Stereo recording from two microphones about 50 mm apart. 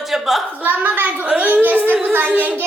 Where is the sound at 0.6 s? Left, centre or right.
Right.